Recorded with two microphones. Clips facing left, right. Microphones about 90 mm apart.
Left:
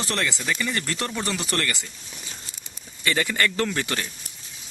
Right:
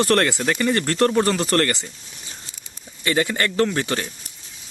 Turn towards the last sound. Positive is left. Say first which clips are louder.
# right 5 dB
turn(degrees=-25)  # may be behind; listen again after turning